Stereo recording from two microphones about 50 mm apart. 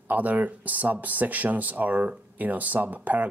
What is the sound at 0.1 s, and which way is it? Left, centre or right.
Speech, right.